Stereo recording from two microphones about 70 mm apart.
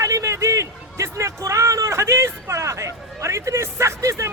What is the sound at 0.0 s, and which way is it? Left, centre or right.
A man's voice, right.